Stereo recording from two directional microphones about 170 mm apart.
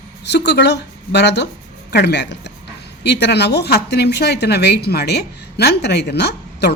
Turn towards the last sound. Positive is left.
turn(degrees=80)